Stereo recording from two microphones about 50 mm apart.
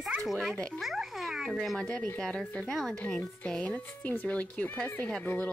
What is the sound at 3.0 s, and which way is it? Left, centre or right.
Speech, left.